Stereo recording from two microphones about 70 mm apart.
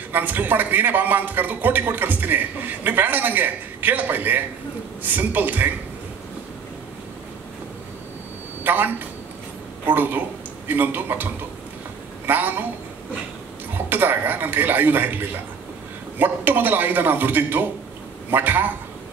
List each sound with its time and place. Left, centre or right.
0.1 s a man's voice: right
8.6 s a man's voice: right
13.7 s a man's voice: right